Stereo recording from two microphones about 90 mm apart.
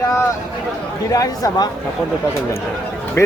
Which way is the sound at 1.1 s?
40° left (ahead or behind).